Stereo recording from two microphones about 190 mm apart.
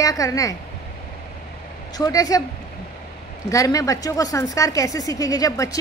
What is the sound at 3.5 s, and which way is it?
A woman's voice, 20° left (ahead or behind).